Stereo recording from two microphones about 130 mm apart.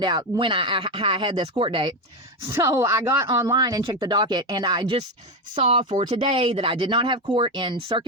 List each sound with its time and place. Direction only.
0.0 s speech: 35° right (ahead or behind)
2.5 s speech: 20° right (ahead or behind); by 8.0 s 40° right (ahead or behind)